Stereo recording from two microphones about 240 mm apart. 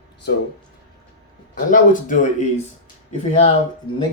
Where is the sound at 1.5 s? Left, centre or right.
Left.